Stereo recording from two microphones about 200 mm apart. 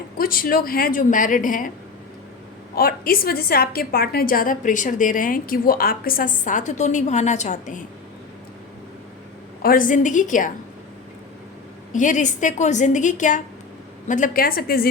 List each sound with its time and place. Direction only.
0.2 s a woman's voice: 45° left (ahead or behind)
2.7 s a woman's voice: 50° left (ahead or behind)
9.6 s a woman's voice: 40° left (ahead or behind)
11.9 s a woman's voice: 40° left (ahead or behind)